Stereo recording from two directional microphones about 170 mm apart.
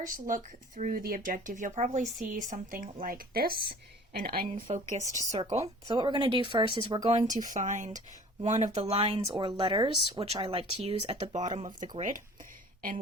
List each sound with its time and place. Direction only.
0.0 s speech: 50° right (ahead or behind)
4.7 s speech: 45° right (ahead or behind)
5.0 s speech: 20° left (ahead or behind)
5.4 s speech: 40° right (ahead or behind)
5.9 s speech: 25° right (ahead or behind)
7.1 s speech: 50° right (ahead or behind)